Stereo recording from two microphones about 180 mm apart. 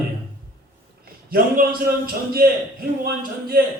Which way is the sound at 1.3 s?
50° right (ahead or behind).